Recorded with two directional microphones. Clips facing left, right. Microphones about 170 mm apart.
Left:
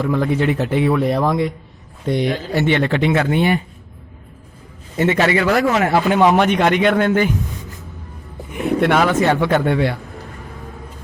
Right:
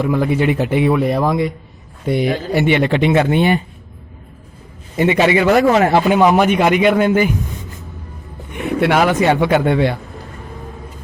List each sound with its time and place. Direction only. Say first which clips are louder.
0.0 s speech: right 2 dB; 10° right (ahead or behind)
1.0 s speech: right 1 dB; centre (ahead or behind); by 3.6 s 20° right (ahead or behind)
4.9 s speech: right 3 dB; 15° right (ahead or behind)
6.1 s speech: right 2 dB; 5° right (ahead or behind)
8.4 s speech: even; centre (ahead or behind); by 10.0 s 20° right (ahead or behind)